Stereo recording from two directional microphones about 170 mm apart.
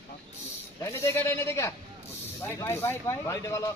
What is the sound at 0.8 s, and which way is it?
A man's voice, 15° left (ahead or behind).